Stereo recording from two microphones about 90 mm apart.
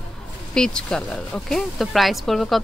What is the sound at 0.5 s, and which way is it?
Speech, 10° left (ahead or behind).